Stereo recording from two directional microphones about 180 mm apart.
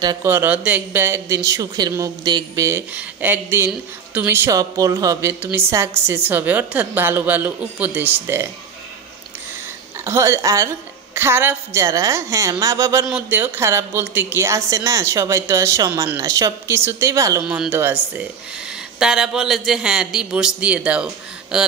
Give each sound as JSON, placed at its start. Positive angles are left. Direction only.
{"t": 0.0, "sound": "speech", "side_deg": -20}
{"t": 10.0, "sound": "speech", "side_deg": -15}
{"t": 17.4, "sound": "a man's voice", "side_deg": -5}